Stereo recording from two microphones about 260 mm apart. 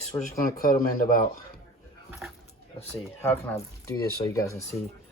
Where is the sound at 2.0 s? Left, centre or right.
Centre.